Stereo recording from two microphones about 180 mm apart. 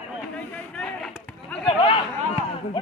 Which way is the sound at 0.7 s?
5° left (ahead or behind).